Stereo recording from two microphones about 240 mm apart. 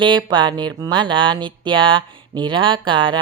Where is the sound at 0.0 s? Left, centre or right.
Centre.